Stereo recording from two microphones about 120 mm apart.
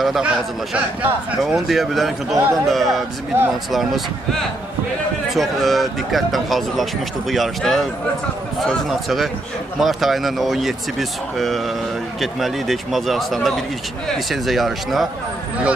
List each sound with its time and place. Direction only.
0.0 s speech: centre (ahead or behind)
1.4 s speech: centre (ahead or behind)
2.3 s speech: 25° right (ahead or behind)
2.7 s speech: centre (ahead or behind)
3.3 s speech: 20° right (ahead or behind)
5.3 s speech: centre (ahead or behind)